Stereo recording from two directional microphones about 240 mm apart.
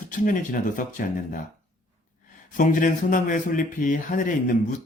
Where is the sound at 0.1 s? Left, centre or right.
Left.